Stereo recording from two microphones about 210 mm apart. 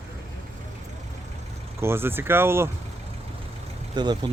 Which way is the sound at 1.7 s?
10° right (ahead or behind).